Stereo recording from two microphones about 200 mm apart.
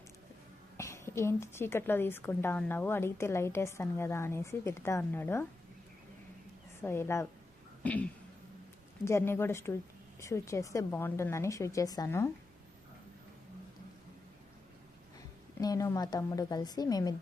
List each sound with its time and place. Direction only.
0.8 s a woman's voice: 15° left (ahead or behind)
6.8 s a woman's voice: 10° left (ahead or behind)
9.0 s a woman's voice: 15° left (ahead or behind)
15.6 s a woman's voice: 15° left (ahead or behind)